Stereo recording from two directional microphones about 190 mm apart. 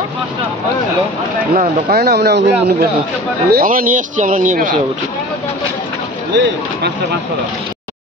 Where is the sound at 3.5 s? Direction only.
50° right (ahead or behind).